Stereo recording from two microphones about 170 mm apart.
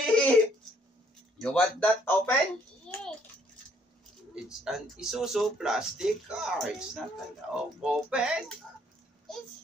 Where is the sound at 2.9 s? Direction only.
5° left (ahead or behind).